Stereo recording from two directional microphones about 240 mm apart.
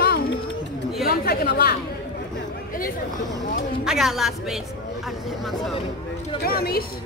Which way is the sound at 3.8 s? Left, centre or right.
Centre.